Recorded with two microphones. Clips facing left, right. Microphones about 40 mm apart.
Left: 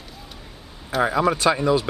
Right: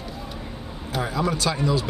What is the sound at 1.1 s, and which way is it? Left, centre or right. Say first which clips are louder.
Speech: left 4 dB; left.